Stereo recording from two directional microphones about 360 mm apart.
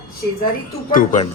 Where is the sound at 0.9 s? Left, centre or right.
Left.